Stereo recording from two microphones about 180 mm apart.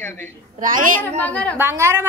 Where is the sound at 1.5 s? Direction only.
15° right (ahead or behind).